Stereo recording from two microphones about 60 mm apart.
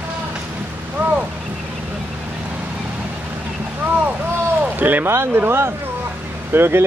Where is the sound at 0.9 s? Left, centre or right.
Right.